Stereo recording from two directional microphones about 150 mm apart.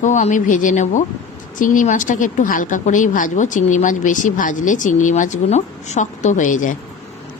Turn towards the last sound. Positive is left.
turn(degrees=60)  # may be behind; listen again after turning